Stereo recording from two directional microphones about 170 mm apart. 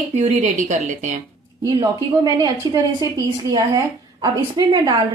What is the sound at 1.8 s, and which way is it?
A woman's voice, 20° right (ahead or behind).